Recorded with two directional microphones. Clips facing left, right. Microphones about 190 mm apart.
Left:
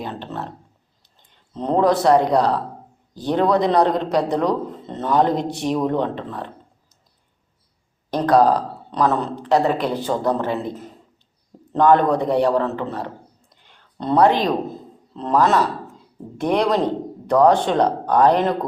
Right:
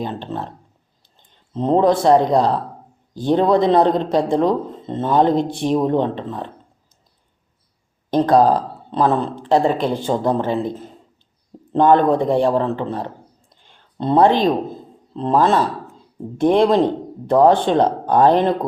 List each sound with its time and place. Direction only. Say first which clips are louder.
0.0 s speech: right 3 dB; 25° right (ahead or behind)
1.5 s speech: right 2 dB; 25° right (ahead or behind)
8.1 s speech: right 2 dB; 25° right (ahead or behind)